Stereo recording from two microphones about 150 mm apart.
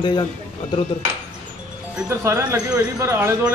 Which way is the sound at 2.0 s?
20° right (ahead or behind).